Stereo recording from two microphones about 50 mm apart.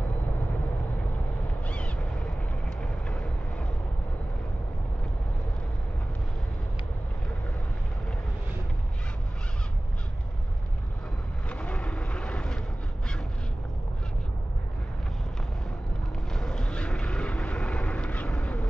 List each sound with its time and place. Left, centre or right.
2.8 s vehicle: left
11.4 s vehicle: left
16.3 s vehicle: centre